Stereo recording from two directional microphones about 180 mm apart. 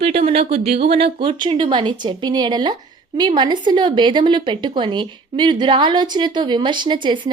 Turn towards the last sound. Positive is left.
turn(degrees=-25)  # may be behind; listen again after turning